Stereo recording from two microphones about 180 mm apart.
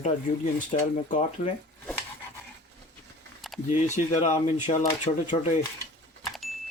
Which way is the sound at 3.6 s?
45° left (ahead or behind).